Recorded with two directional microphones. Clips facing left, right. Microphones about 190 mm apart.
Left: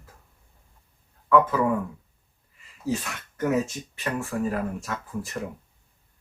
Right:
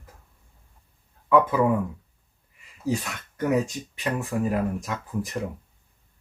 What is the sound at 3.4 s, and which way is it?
Speech, 15° right (ahead or behind).